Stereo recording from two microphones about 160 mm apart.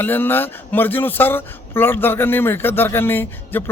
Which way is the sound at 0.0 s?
15° left (ahead or behind).